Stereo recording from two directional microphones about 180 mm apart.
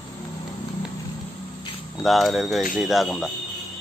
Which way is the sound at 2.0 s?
Centre (ahead or behind).